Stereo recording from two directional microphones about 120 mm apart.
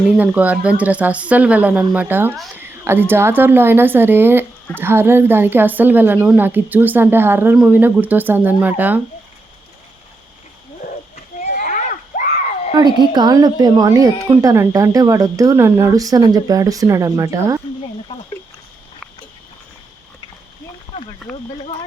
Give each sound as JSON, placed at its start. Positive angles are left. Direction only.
{"t": 0.2, "sound": "a woman's voice", "side_deg": -10}
{"t": 11.4, "sound": "a sound", "side_deg": 90}
{"t": 13.1, "sound": "a woman's voice", "side_deg": -35}